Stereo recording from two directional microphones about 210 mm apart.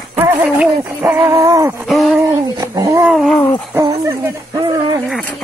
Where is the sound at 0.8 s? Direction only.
10° right (ahead or behind).